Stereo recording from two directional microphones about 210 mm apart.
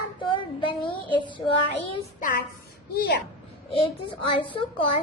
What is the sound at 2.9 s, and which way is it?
Speech, 50° left (ahead or behind).